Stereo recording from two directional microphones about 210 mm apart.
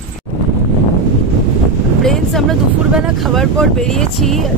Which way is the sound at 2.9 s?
Centre (ahead or behind).